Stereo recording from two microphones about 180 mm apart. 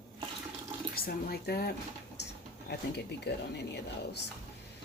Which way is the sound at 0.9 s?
60° left (ahead or behind).